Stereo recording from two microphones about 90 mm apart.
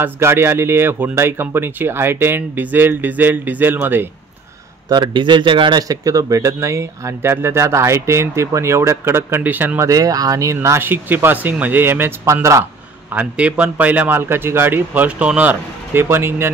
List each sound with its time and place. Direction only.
0.0 s speech: 30° right (ahead or behind)
4.8 s speech: 50° right (ahead or behind)
5.8 s speech: 40° right (ahead or behind); by 9.8 s 20° right (ahead or behind)
9.8 s speech: 40° right (ahead or behind)
13.1 s speech: 15° right (ahead or behind)